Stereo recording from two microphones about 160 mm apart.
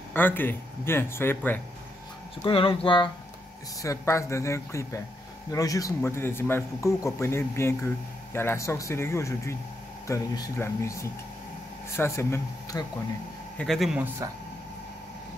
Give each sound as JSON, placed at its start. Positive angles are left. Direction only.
{"t": 0.1, "sound": "a man's voice", "side_deg": 10}
{"t": 2.4, "sound": "speech", "side_deg": 35}
{"t": 3.8, "sound": "a man's voice", "side_deg": 20}
{"t": 13.6, "sound": "a man's voice", "side_deg": 0}